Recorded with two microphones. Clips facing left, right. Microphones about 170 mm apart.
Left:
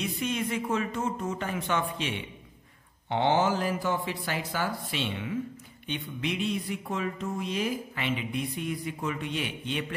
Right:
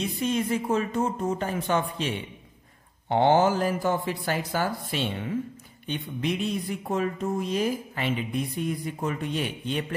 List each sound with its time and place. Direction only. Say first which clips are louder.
0.0 s speech: right 4 dB; 35° right (ahead or behind)